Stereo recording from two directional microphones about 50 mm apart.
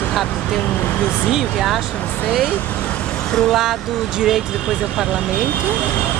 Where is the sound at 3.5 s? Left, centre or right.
Centre.